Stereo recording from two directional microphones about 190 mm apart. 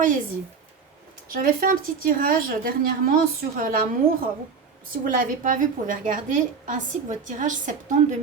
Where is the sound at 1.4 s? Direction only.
45° right (ahead or behind).